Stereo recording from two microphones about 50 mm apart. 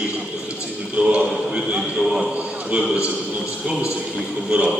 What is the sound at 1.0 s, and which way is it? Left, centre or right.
Speech, right.